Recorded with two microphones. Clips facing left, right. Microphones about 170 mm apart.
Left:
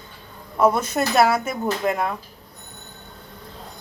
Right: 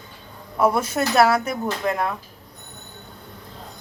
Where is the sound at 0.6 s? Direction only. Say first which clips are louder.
Left 1 dB; 10° right (ahead or behind).